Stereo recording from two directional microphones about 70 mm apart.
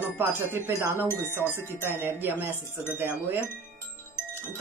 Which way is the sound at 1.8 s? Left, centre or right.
Right.